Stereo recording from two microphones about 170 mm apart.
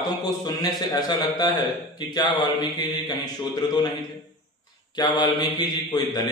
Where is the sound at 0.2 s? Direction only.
25° left (ahead or behind).